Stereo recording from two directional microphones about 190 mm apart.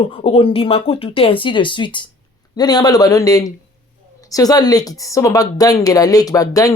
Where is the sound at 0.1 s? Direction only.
30° left (ahead or behind).